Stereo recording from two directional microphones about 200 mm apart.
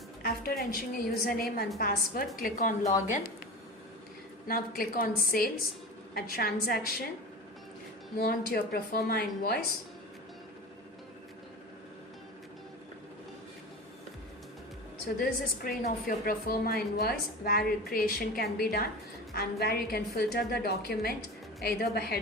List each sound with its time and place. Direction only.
0.2 s a woman's voice: 50° left (ahead or behind)
4.4 s a woman's voice: 45° left (ahead or behind)
8.2 s a woman's voice: 50° left (ahead or behind)
15.0 s a woman's voice: 45° left (ahead or behind)